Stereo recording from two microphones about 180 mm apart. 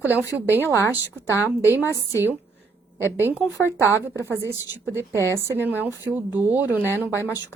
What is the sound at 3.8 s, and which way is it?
A woman's voice, 15° left (ahead or behind).